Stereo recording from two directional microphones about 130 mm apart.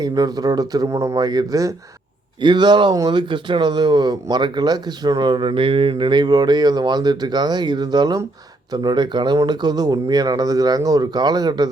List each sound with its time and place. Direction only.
0.0 s speech: 30° right (ahead or behind)